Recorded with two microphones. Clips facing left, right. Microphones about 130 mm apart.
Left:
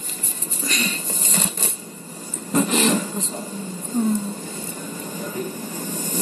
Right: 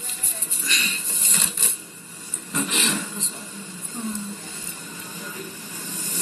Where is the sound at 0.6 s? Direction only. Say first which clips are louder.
Left 6 dB; 40° left (ahead or behind).